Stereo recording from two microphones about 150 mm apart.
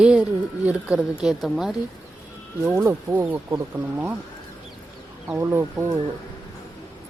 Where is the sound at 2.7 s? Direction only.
15° right (ahead or behind).